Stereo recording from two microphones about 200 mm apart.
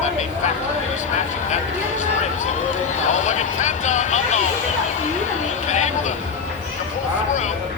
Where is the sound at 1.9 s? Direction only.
40° left (ahead or behind).